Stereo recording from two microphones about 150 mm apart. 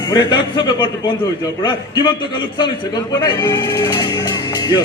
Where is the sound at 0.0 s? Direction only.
30° left (ahead or behind).